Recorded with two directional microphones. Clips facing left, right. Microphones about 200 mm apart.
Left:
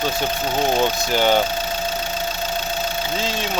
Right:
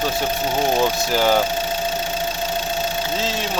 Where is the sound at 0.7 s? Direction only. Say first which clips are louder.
Even; centre (ahead or behind).